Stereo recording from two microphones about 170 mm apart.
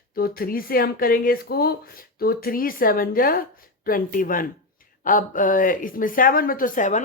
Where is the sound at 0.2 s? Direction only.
60° left (ahead or behind).